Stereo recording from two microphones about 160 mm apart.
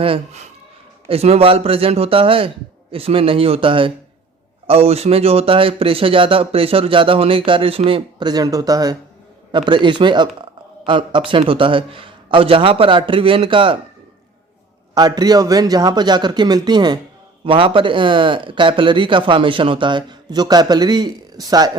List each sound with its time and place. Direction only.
0.0 s speech: 35° right (ahead or behind)
14.9 s speech: 25° right (ahead or behind)